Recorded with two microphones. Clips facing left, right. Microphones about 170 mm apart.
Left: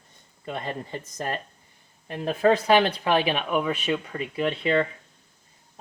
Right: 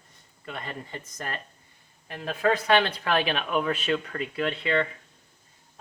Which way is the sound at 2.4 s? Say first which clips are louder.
Left 4 dB; 30° left (ahead or behind).